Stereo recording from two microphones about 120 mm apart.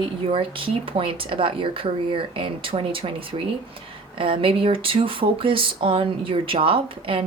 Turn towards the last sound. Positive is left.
turn(degrees=-45)  # may be behind; listen again after turning